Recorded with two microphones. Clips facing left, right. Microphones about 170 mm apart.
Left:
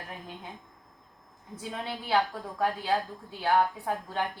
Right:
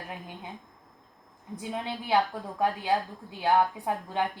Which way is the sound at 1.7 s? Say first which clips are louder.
Right 1 dB; 15° right (ahead or behind).